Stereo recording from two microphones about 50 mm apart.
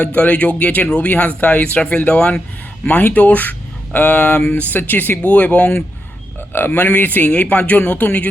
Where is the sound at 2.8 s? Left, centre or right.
Left.